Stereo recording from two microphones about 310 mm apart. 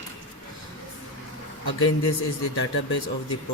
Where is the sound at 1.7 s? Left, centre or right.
Left.